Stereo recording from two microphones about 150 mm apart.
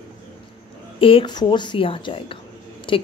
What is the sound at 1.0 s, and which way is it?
A woman's voice, 35° left (ahead or behind).